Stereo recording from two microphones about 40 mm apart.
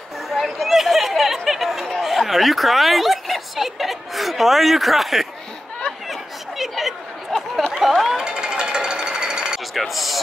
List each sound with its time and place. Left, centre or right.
0.3 s chatter: centre
2.0 s speech: centre
6.6 s chatter: centre
7.3 s chatter: centre
7.7 s speech: centre
8.2 s jackhammer: centre
9.8 s speech: centre